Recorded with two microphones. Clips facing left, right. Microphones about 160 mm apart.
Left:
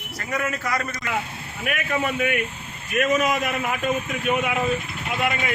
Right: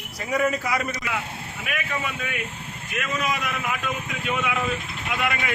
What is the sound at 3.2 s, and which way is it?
A man's voice, 40° left (ahead or behind).